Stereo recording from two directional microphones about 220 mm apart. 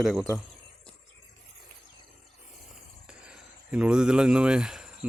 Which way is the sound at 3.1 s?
5° right (ahead or behind).